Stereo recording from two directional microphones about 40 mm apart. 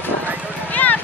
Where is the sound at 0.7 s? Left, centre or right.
Left.